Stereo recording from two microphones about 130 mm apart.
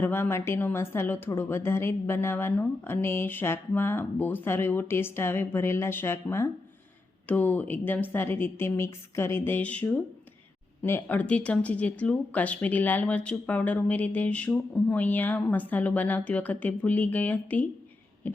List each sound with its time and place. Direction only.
0.0 s speech: 15° left (ahead or behind)